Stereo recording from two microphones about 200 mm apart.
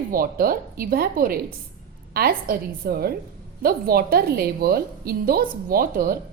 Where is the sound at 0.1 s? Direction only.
45° right (ahead or behind).